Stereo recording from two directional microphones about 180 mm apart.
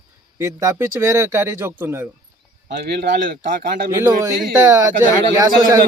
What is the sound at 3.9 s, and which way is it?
A man's voice, 15° right (ahead or behind).